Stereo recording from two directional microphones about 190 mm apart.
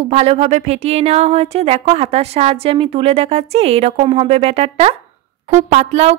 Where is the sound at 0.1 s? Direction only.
35° right (ahead or behind).